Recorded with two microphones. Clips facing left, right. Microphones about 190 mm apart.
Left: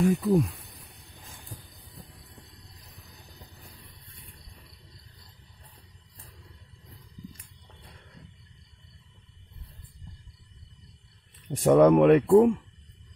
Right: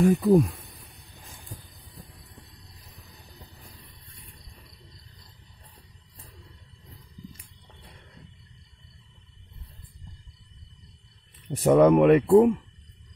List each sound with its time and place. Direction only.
0.0 s speech: 55° right (ahead or behind)
11.4 s speech: 5° right (ahead or behind)